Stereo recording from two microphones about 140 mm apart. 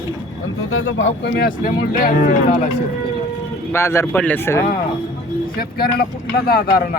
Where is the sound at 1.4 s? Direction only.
90° left.